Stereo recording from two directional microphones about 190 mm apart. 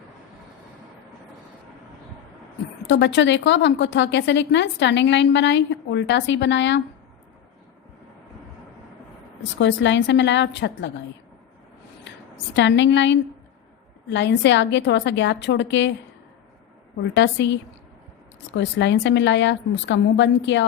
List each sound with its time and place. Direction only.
2.8 s a woman's voice: 70° left (ahead or behind)
9.4 s a woman's voice: 70° left (ahead or behind)
12.5 s a woman's voice: 70° left (ahead or behind)
17.0 s a woman's voice: 65° left (ahead or behind)